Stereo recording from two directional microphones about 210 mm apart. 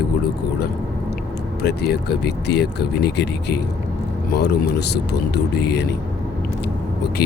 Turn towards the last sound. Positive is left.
turn(degrees=50)  # may be behind; listen again after turning